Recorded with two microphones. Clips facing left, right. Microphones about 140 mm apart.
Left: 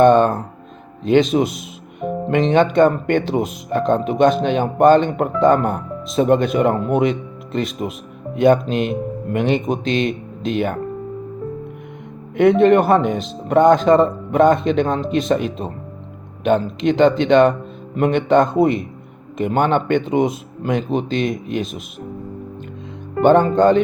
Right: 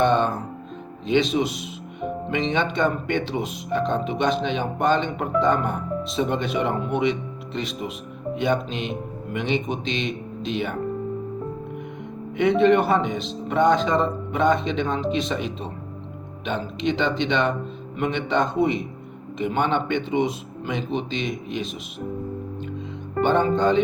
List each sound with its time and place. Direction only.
0.0 s a sound: 50° left (ahead or behind)
1.0 s speech: 45° left (ahead or behind)
12.4 s speech: 50° left (ahead or behind)
23.2 s speech: 50° left (ahead or behind)